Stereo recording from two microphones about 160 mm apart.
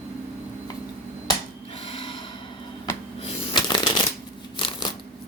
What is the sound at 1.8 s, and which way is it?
Snort, 35° left (ahead or behind).